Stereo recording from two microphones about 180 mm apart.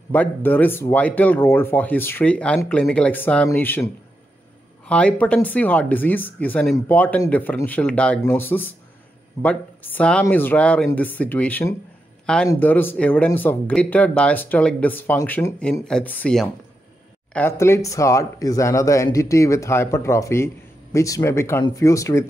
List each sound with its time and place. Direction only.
0.1 s speech: 10° left (ahead or behind)